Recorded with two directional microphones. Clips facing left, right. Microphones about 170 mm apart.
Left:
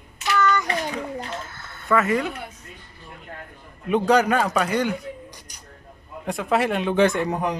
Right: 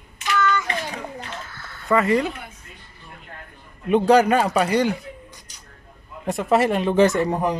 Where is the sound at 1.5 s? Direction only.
20° left (ahead or behind).